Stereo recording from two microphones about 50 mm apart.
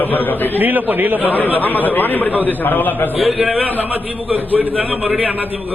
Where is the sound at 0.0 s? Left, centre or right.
Left.